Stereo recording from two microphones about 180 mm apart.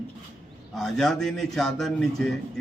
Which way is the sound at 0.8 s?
Centre (ahead or behind).